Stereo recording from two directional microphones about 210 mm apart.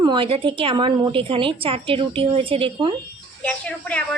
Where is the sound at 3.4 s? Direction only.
5° left (ahead or behind).